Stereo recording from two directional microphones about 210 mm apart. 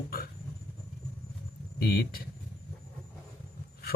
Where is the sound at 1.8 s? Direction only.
45° left (ahead or behind).